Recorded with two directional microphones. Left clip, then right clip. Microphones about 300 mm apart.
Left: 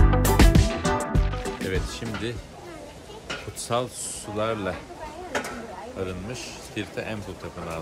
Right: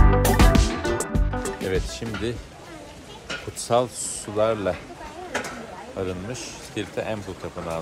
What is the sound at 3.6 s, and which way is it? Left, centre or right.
A man's voice, centre.